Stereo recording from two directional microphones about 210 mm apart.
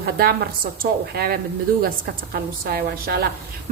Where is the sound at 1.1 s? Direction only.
45° right (ahead or behind).